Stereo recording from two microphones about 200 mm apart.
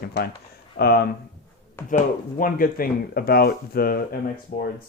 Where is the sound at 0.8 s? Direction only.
50° left (ahead or behind).